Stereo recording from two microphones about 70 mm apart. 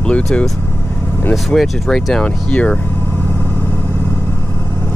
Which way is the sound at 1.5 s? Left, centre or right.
Centre.